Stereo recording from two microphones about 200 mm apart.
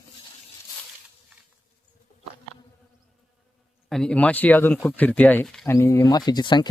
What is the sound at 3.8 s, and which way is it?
Speech, 5° left (ahead or behind).